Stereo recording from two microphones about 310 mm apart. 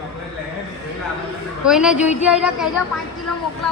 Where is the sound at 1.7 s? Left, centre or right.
Centre.